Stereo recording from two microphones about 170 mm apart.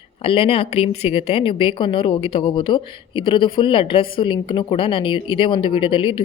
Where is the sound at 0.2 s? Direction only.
35° left (ahead or behind).